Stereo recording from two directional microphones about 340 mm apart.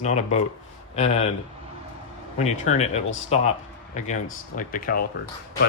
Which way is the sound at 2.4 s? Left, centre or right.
Centre.